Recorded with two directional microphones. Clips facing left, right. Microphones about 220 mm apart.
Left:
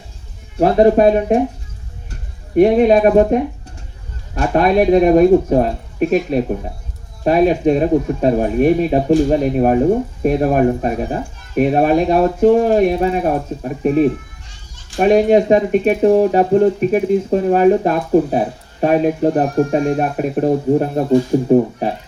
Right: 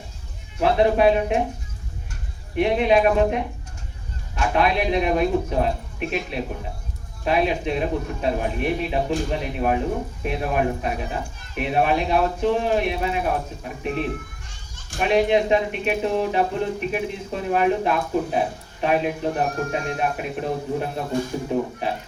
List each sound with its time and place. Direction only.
0.6 s speech: 45° left (ahead or behind)
2.6 s speech: 45° left (ahead or behind)